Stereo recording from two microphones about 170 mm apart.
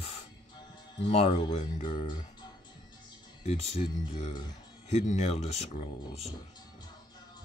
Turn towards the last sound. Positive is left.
turn(degrees=40)  # may be behind; listen again after turning